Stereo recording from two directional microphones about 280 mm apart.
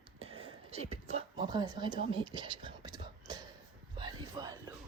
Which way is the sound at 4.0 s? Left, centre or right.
Centre.